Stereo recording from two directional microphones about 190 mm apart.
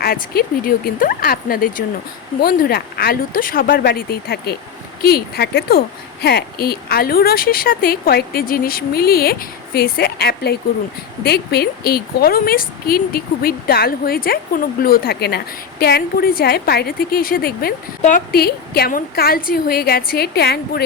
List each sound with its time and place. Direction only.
0.0 s a woman's voice: 50° left (ahead or behind)